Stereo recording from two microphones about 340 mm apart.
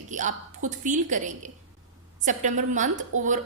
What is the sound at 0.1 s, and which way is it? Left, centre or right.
A woman's voice, right.